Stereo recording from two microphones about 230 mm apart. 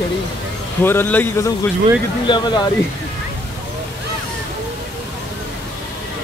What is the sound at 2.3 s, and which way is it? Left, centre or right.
Speech, centre.